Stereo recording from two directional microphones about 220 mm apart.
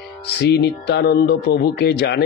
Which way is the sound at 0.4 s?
45° left (ahead or behind).